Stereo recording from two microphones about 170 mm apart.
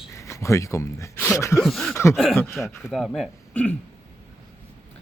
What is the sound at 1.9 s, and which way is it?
Speech, 15° left (ahead or behind).